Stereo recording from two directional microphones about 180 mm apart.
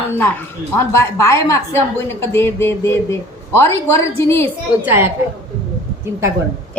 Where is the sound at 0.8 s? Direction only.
15° left (ahead or behind).